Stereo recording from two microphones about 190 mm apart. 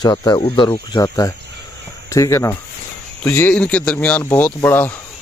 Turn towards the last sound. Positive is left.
turn(degrees=10)  # may be behind; listen again after turning